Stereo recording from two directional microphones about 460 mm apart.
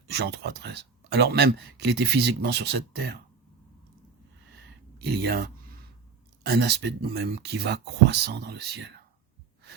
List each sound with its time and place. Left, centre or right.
0.1 s speech: right
4.9 s speech: right